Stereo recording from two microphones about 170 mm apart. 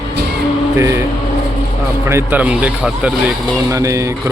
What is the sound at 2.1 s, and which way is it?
Speech, 10° right (ahead or behind).